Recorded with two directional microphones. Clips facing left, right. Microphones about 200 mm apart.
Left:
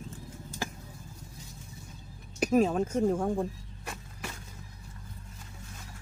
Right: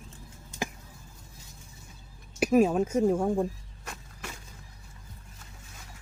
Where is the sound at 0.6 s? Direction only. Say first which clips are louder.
Right 3 dB; 15° right (ahead or behind).